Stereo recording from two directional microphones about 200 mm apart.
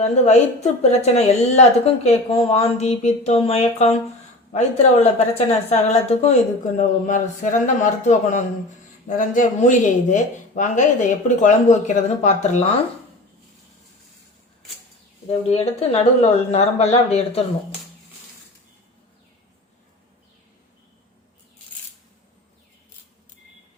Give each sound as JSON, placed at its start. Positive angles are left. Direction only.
{"t": 0.0, "sound": "a woman's voice", "side_deg": 35}
{"t": 15.4, "sound": "a woman's voice", "side_deg": 30}